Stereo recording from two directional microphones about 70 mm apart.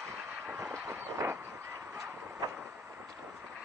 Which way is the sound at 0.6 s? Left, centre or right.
Right.